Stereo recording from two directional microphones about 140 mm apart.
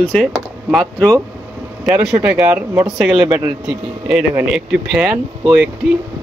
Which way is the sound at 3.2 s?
30° right (ahead or behind).